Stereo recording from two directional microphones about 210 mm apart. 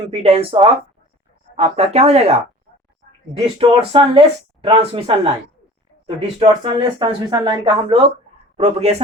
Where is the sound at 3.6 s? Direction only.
25° right (ahead or behind).